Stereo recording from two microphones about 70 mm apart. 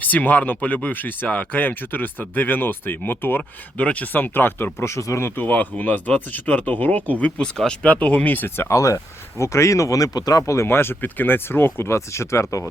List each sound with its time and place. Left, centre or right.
0.0 s speech: left
3.8 s speech: left
5.3 s speech: left
8.7 s speech: left
10.4 s speech: left